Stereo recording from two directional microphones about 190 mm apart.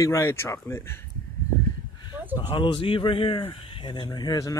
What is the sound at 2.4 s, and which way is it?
Speech, 25° left (ahead or behind).